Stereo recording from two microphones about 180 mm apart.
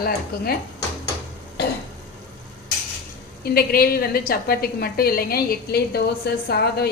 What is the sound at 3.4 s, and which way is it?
A woman's voice, 60° left (ahead or behind).